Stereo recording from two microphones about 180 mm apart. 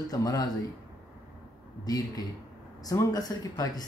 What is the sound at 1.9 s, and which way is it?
Speech, 20° left (ahead or behind).